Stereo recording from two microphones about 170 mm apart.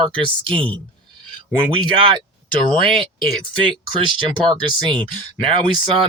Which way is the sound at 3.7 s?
30° right (ahead or behind).